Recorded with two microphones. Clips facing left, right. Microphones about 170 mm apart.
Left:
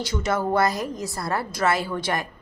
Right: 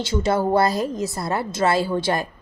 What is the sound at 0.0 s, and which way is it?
A woman's voice, 30° right (ahead or behind).